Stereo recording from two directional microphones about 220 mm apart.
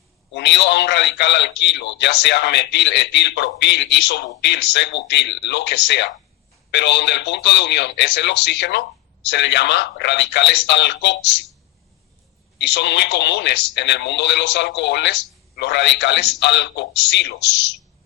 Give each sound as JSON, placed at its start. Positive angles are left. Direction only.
{"t": 0.3, "sound": "a man's voice", "side_deg": 50}
{"t": 12.6, "sound": "a man's voice", "side_deg": 50}